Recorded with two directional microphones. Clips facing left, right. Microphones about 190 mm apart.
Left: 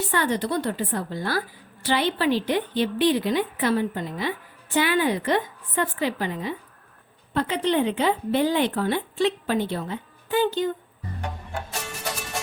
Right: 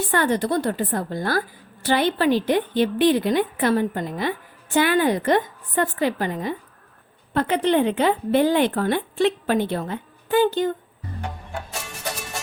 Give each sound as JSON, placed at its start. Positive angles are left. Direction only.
{"t": 0.1, "sound": "a woman's voice", "side_deg": -50}